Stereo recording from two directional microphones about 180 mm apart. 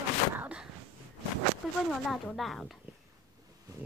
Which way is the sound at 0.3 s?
10° right (ahead or behind).